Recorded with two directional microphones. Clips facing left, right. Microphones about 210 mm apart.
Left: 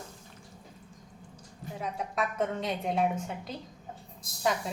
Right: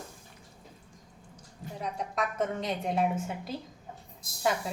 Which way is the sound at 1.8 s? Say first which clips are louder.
Even; centre (ahead or behind).